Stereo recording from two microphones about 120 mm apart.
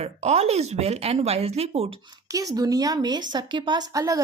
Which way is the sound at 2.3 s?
30° right (ahead or behind).